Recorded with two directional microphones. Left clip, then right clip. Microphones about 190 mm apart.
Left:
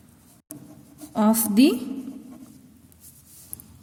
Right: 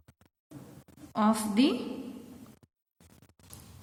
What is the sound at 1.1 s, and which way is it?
Speech, 50° left (ahead or behind).